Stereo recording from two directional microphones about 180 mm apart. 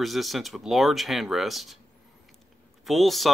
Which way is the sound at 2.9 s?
Centre (ahead or behind).